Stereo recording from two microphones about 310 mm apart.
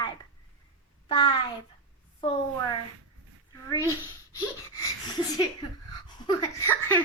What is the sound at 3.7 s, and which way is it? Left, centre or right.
A woman's voice, centre.